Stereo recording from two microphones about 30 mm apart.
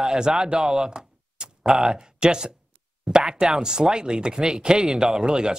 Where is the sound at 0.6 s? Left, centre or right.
Right.